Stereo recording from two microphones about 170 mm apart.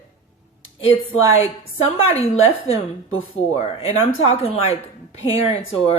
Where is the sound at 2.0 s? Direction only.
35° left (ahead or behind).